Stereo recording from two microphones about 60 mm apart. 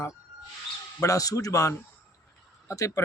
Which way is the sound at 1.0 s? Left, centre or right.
Left.